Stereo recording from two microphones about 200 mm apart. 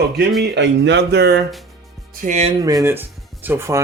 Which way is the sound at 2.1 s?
40° right (ahead or behind).